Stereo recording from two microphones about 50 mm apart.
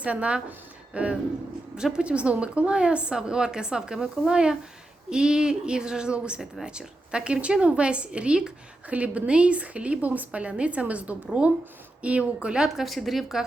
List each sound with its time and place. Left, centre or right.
0.0 s a woman's voice: right
12.6 s a woman's voice: centre